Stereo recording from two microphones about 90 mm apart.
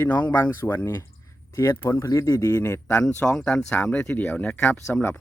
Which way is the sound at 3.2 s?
10° left (ahead or behind).